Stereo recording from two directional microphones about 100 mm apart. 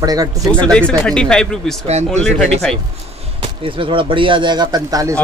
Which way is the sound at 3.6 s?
60° right (ahead or behind).